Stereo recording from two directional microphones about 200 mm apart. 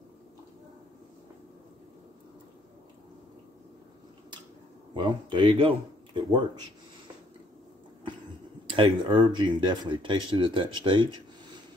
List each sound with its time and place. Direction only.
4.9 s a man's voice: 25° right (ahead or behind)
8.6 s speech: 25° right (ahead or behind)